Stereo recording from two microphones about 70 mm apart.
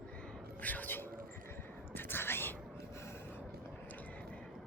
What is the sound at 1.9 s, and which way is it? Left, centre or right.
Whispering, left.